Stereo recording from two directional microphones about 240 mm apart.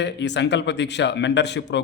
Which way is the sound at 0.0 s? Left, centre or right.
Left.